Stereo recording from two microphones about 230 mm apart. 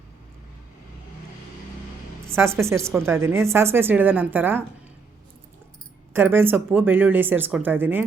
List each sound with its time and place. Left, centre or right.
2.2 s a woman's voice: centre
6.1 s a woman's voice: centre